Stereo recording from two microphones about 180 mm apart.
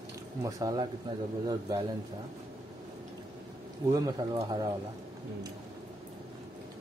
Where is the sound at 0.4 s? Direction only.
20° right (ahead or behind).